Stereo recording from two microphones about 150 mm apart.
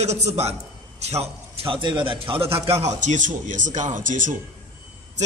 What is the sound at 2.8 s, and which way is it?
Speech, 50° right (ahead or behind).